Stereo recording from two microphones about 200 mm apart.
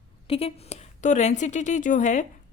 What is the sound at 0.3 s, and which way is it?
Speech, 30° left (ahead or behind).